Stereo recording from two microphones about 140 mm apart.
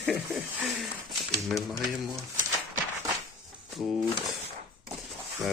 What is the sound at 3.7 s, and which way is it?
Speech, centre (ahead or behind).